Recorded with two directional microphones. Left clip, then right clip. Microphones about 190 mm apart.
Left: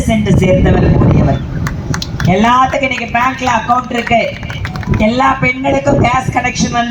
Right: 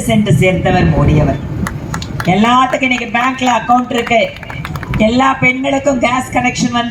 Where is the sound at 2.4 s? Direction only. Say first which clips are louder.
Left 1 dB; 45° right (ahead or behind).